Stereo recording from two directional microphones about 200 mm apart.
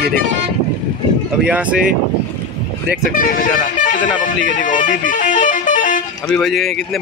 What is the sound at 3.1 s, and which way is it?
Speech, 45° left (ahead or behind).